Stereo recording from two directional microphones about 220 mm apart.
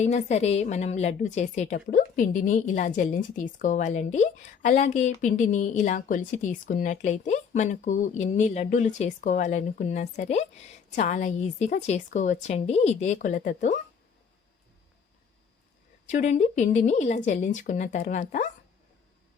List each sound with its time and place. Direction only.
0.0 s a woman's voice: 30° left (ahead or behind)
16.0 s a woman's voice: 35° left (ahead or behind)